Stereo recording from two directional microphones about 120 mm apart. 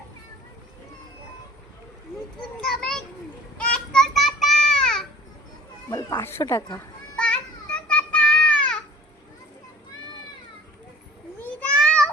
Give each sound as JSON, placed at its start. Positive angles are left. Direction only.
{"t": 2.6, "sound": "children playing", "side_deg": 5}
{"t": 5.9, "sound": "cat", "side_deg": 35}
{"t": 6.1, "sound": "speech", "side_deg": 20}
{"t": 7.2, "sound": "child singing", "side_deg": 10}
{"t": 11.3, "sound": "a sound", "side_deg": 10}